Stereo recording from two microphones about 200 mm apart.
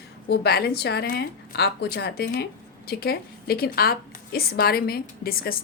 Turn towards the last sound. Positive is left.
turn(degrees=50)  # may be behind; listen again after turning